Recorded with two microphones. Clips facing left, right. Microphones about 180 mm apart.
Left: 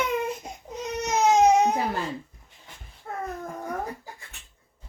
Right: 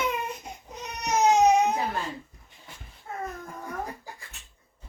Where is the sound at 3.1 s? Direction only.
55° left (ahead or behind).